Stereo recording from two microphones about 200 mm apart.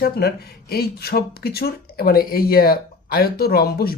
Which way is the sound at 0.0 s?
50° left (ahead or behind).